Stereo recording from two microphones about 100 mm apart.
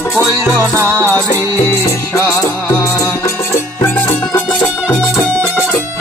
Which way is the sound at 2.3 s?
25° left (ahead or behind).